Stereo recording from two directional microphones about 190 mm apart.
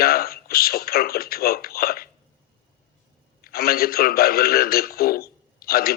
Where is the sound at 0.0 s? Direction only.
55° left (ahead or behind).